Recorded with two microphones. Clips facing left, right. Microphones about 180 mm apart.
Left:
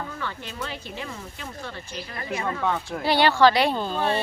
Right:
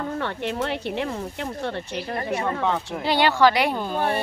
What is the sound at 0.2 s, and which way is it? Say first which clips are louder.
Speech: right 7 dB; 65° right (ahead or behind).